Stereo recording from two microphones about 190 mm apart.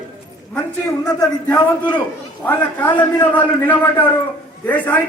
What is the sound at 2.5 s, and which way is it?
A man's voice, 10° left (ahead or behind).